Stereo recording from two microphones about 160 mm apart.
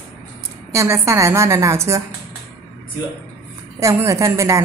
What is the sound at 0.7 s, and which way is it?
A woman's voice, 15° right (ahead or behind).